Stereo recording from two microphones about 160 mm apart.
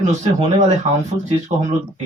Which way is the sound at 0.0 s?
45° right (ahead or behind).